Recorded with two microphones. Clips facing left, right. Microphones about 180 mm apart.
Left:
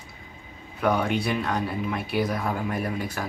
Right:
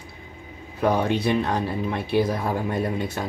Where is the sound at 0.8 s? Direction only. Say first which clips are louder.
Right 3 dB; 25° right (ahead or behind).